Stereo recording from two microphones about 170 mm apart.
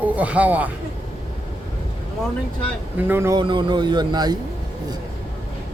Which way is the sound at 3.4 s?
30° right (ahead or behind).